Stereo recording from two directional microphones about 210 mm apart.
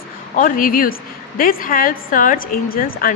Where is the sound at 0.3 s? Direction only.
40° left (ahead or behind).